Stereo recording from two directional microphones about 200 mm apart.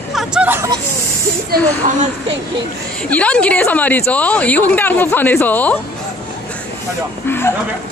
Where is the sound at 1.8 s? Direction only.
40° right (ahead or behind).